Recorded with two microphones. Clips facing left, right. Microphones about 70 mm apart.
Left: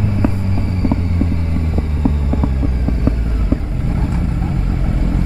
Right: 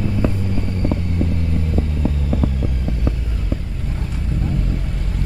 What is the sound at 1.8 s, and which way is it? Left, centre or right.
Vehicle, left.